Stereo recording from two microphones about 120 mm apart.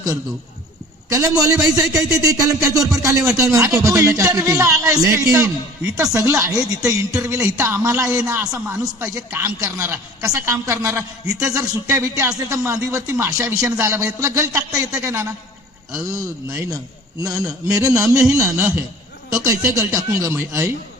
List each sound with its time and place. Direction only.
1.1 s a man's voice: 25° right (ahead or behind)
16.5 s a man's voice: 30° right (ahead or behind)